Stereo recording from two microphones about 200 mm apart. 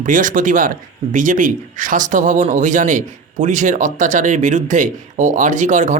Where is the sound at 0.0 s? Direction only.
40° right (ahead or behind).